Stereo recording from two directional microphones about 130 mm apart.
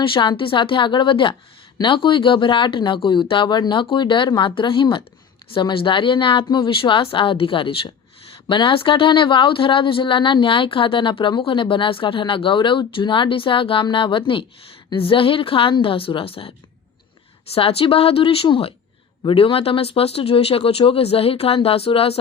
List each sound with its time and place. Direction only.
0.0 s speech: 40° left (ahead or behind)